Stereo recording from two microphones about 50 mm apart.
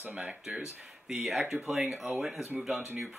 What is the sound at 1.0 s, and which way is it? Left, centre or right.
Speech, centre.